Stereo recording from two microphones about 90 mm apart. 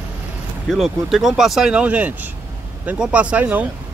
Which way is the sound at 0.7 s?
Centre (ahead or behind).